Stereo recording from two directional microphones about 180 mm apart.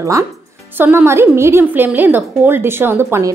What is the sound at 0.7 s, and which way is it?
A woman's voice, 10° right (ahead or behind).